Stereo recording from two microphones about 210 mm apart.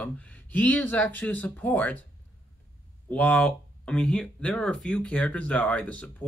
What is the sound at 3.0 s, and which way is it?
Speech, 5° left (ahead or behind).